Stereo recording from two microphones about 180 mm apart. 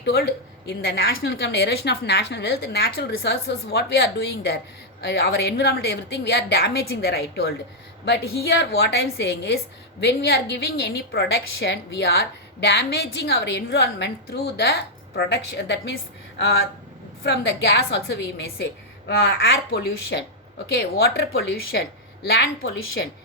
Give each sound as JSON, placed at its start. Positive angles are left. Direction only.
{"t": 0.0, "sound": "a woman's voice", "side_deg": 60}